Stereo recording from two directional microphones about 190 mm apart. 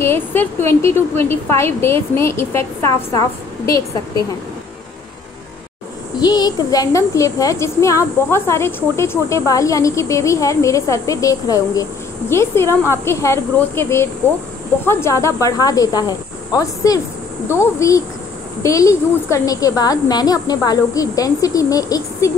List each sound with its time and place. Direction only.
0.0 s a woman's voice: 10° left (ahead or behind)
6.1 s a woman's voice: 20° left (ahead or behind)